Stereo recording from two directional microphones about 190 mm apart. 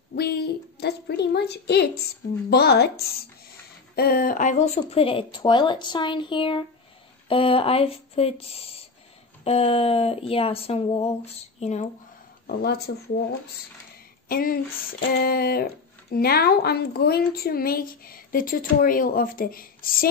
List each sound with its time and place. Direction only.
0.1 s a woman's voice: 55° left (ahead or behind); by 11.9 s 35° left (ahead or behind)
12.4 s a woman's voice: 55° left (ahead or behind)
14.3 s speech: 50° left (ahead or behind)